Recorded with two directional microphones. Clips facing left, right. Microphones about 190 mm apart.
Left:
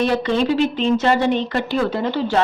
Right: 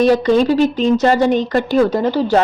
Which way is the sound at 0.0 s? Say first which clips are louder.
Right 6 dB; 40° right (ahead or behind).